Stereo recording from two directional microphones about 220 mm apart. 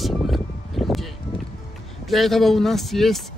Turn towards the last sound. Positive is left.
turn(degrees=0)  # may be behind; listen again after turning